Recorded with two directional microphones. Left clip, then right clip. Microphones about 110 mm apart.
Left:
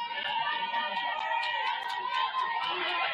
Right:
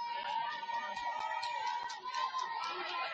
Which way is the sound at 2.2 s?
Centre (ahead or behind).